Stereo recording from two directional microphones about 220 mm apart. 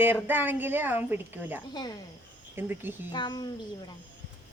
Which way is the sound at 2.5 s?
10° right (ahead or behind).